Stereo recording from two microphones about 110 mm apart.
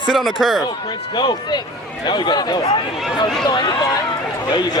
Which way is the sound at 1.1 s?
45° left (ahead or behind).